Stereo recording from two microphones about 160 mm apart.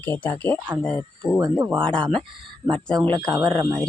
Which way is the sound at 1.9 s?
5° left (ahead or behind).